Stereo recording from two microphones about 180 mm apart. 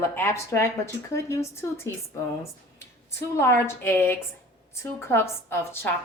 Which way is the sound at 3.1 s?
15° left (ahead or behind).